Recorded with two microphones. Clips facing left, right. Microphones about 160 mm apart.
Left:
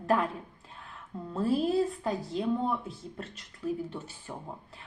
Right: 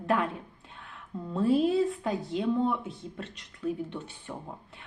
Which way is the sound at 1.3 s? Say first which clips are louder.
Right 3 dB; centre (ahead or behind).